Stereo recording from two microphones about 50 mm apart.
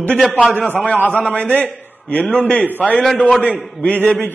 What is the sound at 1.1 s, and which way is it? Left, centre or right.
A man's voice, left.